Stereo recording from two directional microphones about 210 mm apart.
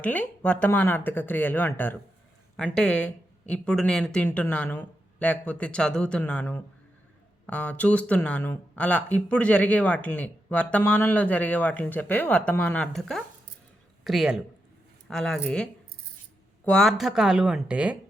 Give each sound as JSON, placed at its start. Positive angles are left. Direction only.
{"t": 0.0, "sound": "speech", "side_deg": 5}